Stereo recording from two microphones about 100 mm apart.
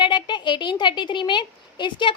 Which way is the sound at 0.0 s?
50° left (ahead or behind).